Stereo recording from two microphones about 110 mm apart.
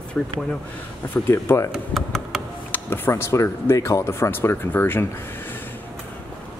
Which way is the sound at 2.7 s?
20° left (ahead or behind).